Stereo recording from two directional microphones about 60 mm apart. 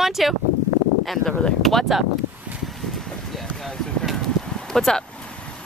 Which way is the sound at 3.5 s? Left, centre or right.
Centre.